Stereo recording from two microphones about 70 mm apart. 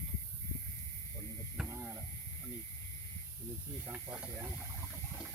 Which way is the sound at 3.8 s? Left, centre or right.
Right.